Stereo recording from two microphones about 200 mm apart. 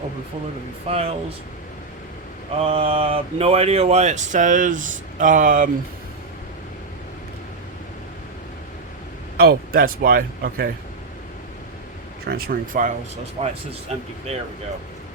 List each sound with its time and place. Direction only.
0.9 s speech: 30° right (ahead or behind)
2.6 s speech: 30° right (ahead or behind)
9.4 s speech: 50° right (ahead or behind)
12.2 s speech: 50° right (ahead or behind)
13.4 s speech: 30° right (ahead or behind)